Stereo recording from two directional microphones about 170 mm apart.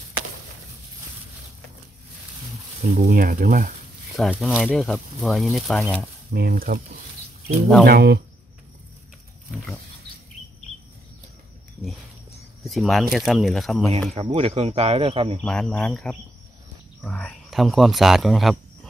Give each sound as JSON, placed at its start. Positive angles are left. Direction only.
{"t": 2.9, "sound": "speech", "side_deg": -50}
{"t": 4.2, "sound": "speech", "side_deg": 0}
{"t": 6.3, "sound": "speech", "side_deg": -60}
{"t": 7.8, "sound": "speech", "side_deg": -65}
{"t": 12.6, "sound": "speech", "side_deg": 0}
{"t": 14.2, "sound": "speech", "side_deg": -35}
{"t": 15.4, "sound": "speech", "side_deg": 5}